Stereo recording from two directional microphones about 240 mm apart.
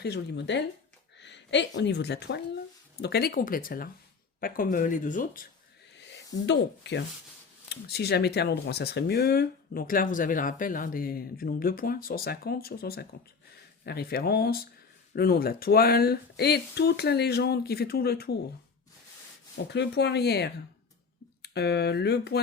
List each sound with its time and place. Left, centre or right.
0.0 s speech: left
6.1 s speech: left
19.7 s speech: left